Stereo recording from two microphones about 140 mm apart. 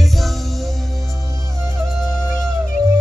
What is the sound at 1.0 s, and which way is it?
Music, 20° right (ahead or behind).